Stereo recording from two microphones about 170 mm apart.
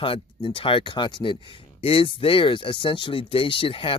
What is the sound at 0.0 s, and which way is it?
Speech, 30° left (ahead or behind).